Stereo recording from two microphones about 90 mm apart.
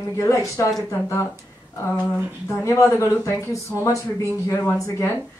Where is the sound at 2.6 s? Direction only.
35° left (ahead or behind).